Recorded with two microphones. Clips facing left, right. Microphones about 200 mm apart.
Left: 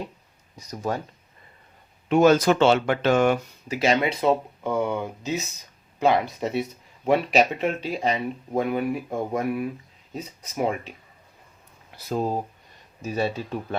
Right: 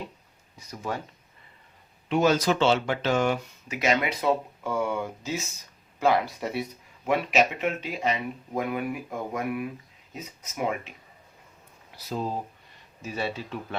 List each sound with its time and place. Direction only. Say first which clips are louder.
0.5 s speech: left 5 dB; 40° left (ahead or behind)
2.0 s speech: left 5 dB; 50° left (ahead or behind)
3.7 s speech: left 3 dB; 30° left (ahead or behind)
11.9 s speech: left 5 dB; 50° left (ahead or behind)